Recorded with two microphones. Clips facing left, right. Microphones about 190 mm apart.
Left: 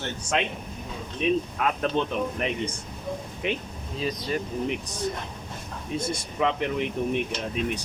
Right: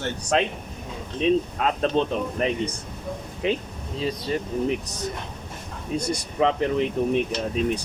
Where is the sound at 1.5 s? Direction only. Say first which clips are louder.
Right 3 dB; 30° right (ahead or behind).